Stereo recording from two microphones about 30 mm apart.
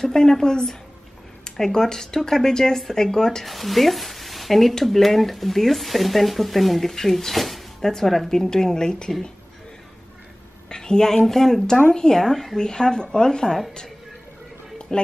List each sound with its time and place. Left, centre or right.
0.0 s speech: centre
3.4 s speech: centre
6.9 s speech: centre
8.3 s speech: centre
10.7 s a woman's voice: left
12.5 s speech: left
14.9 s speech: centre